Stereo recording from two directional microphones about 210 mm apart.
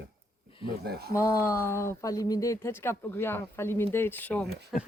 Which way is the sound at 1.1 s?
15° left (ahead or behind).